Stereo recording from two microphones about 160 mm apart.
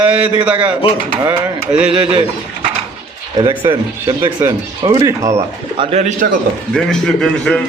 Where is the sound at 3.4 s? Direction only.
30° right (ahead or behind).